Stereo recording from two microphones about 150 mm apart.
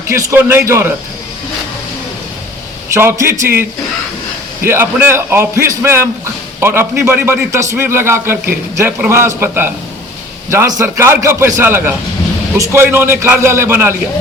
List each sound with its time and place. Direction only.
0.1 s a man's voice: 20° right (ahead or behind)
2.9 s a man's voice: 15° right (ahead or behind)